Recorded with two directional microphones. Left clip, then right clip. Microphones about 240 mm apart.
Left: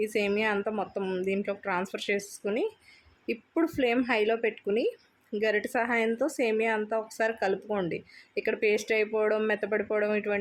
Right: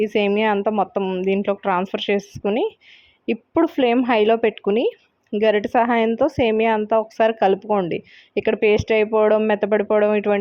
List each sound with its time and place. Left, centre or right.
0.0 s speech: right